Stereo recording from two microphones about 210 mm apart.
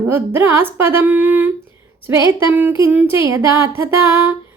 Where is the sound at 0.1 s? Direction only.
10° right (ahead or behind).